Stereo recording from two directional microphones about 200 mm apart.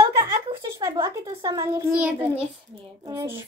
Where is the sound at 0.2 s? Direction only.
20° right (ahead or behind).